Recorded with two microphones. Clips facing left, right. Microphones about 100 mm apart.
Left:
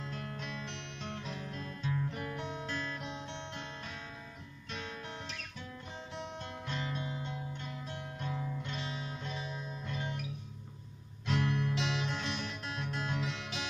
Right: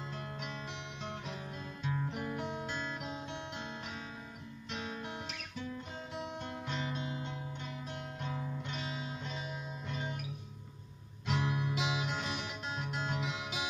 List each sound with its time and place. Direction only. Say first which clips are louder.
0.1 s music: left 1 dB; 15° right (ahead or behind)
3.0 s guitar: right 1 dB; 5° right (ahead or behind)
6.1 s music: right 2 dB; 5° right (ahead or behind)
6.7 s music: even; 15° right (ahead or behind)
9.0 s music: even; 15° right (ahead or behind)
11.2 s music: left 2 dB; 15° right (ahead or behind)